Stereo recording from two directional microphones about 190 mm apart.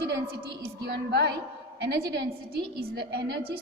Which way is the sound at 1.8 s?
60° right (ahead or behind).